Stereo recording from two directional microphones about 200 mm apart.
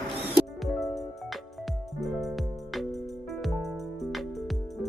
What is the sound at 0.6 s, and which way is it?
Music, centre (ahead or behind).